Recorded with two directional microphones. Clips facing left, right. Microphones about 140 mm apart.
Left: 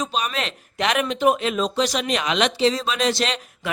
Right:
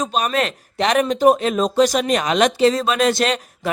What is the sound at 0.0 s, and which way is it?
Speech, 45° right (ahead or behind).